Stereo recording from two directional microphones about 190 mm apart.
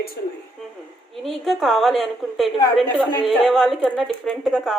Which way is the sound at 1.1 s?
Centre (ahead or behind).